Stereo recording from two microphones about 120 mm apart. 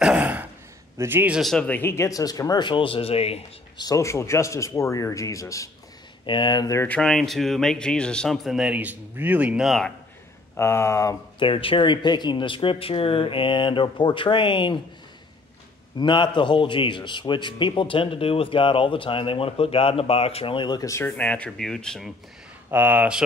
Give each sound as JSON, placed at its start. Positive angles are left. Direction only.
{"t": 0.0, "sound": "gasp", "side_deg": -10}
{"t": 0.9, "sound": "a man's voice", "side_deg": -20}
{"t": 1.3, "sound": "speech", "side_deg": 0}
{"t": 1.7, "sound": "speech", "side_deg": 20}
{"t": 3.7, "sound": "speech", "side_deg": 30}
{"t": 6.2, "sound": "speech", "side_deg": 40}
{"t": 6.8, "sound": "speech", "side_deg": 10}
{"t": 9.7, "sound": "speech", "side_deg": 5}
{"t": 10.5, "sound": "speech", "side_deg": 20}
{"t": 11.3, "sound": "a man's voice", "side_deg": 45}
{"t": 16.0, "sound": "a man's voice", "side_deg": 40}
{"t": 21.1, "sound": "speech", "side_deg": 10}
{"t": 22.7, "sound": "speech", "side_deg": -15}